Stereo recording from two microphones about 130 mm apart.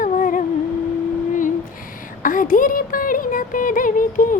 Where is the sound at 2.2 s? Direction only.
90° left.